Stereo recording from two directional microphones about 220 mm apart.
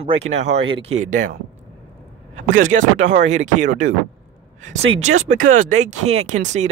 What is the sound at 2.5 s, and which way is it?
Speech, 35° right (ahead or behind).